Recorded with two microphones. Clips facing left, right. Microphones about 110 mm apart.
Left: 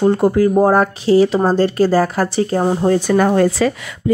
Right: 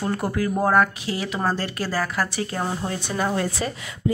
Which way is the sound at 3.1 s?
55° left (ahead or behind).